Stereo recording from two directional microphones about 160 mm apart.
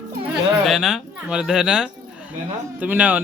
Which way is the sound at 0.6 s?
Centre (ahead or behind).